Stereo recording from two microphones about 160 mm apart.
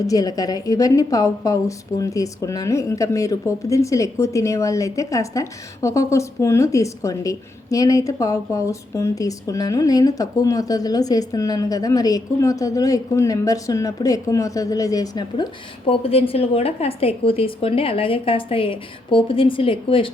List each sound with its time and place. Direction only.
0.1 s a woman's voice: 20° left (ahead or behind)
15.9 s a woman's voice: 35° left (ahead or behind)